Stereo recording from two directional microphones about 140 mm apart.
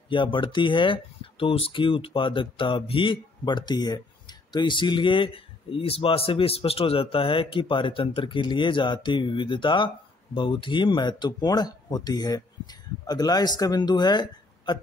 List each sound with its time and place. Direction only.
0.1 s speech: 35° left (ahead or behind)